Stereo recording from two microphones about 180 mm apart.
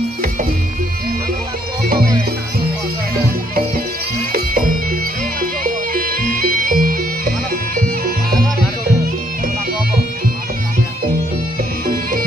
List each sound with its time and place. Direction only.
4.3 s music: 50° right (ahead or behind)